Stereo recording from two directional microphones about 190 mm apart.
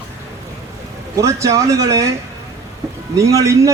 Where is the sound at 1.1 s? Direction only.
15° right (ahead or behind).